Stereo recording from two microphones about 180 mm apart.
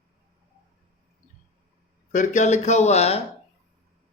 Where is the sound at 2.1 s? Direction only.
45° left (ahead or behind).